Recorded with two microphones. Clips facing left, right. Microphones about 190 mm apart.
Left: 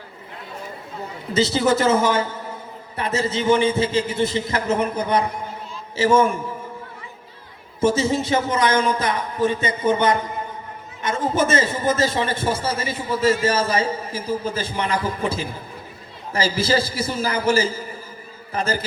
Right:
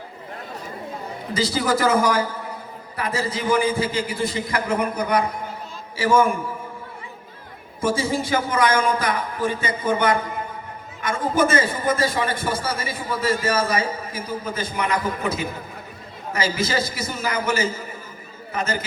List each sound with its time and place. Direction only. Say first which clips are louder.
1.3 s a man's voice: left 3 dB; 25° left (ahead or behind)
7.8 s a man's voice: left 3 dB; 25° left (ahead or behind)